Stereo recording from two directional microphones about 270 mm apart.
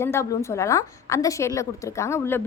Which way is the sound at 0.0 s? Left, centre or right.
Centre.